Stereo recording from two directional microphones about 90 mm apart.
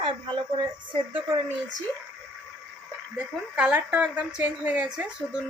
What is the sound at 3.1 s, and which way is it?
Speech, 10° right (ahead or behind).